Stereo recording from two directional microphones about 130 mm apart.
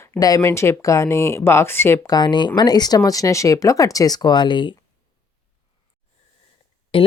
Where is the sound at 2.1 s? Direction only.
35° left (ahead or behind).